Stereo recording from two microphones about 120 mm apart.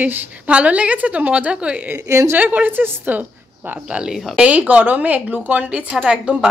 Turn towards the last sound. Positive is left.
turn(degrees=-10)  # may be behind; listen again after turning